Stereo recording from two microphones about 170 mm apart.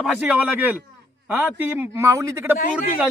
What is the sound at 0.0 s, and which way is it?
A man's voice, 10° right (ahead or behind).